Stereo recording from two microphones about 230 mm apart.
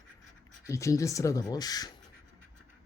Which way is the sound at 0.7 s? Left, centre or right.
Centre.